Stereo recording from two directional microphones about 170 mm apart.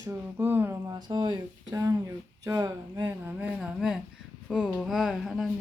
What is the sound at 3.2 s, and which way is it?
Speech, 5° right (ahead or behind).